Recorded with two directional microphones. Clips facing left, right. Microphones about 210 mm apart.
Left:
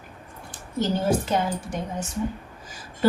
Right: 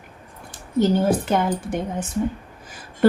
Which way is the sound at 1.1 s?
55° right (ahead or behind).